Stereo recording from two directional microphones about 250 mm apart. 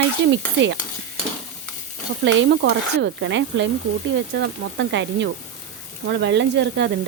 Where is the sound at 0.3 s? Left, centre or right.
Right.